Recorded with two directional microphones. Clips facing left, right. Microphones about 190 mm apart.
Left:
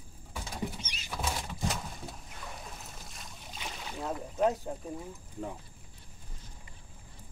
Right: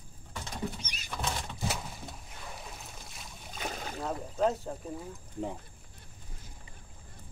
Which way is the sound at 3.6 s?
45° right (ahead or behind).